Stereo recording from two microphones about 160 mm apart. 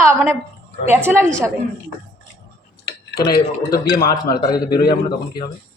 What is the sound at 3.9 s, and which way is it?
Speech, 25° left (ahead or behind).